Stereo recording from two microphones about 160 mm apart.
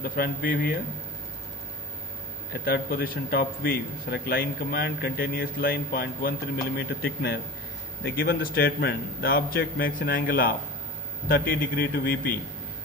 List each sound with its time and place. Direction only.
0.0 s a man's voice: 70° left (ahead or behind)
2.5 s a man's voice: 75° left (ahead or behind)
11.3 s a man's voice: 80° left